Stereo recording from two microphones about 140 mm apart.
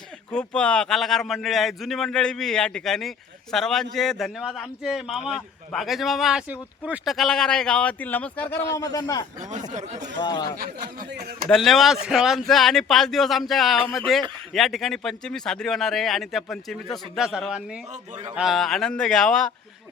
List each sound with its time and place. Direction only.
0.3 s speech: 5° left (ahead or behind)
8.8 s a man's voice: 25° left (ahead or behind)
9.4 s speech: 60° right (ahead or behind)
10.2 s speech: 35° left (ahead or behind)
10.6 s speech: 90° right
11.4 s speech: centre (ahead or behind)